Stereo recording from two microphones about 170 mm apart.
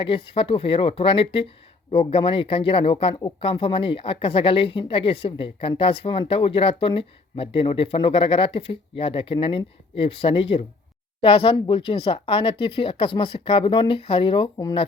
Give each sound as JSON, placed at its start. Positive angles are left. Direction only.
{"t": 0.3, "sound": "speech", "side_deg": 30}